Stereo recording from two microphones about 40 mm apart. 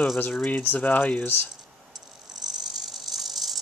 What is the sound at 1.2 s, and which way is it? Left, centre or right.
Speech, left.